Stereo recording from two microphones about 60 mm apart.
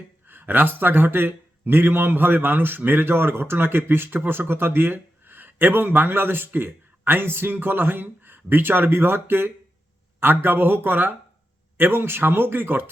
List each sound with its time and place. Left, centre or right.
0.3 s a man's voice: right